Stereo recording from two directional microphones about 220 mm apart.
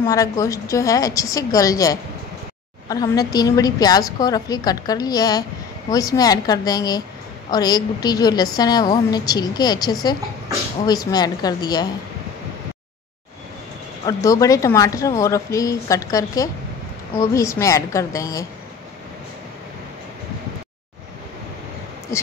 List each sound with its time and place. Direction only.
0.0 s a woman's voice: 15° left (ahead or behind)
14.0 s a woman's voice: 15° left (ahead or behind)
22.1 s speech: 15° left (ahead or behind)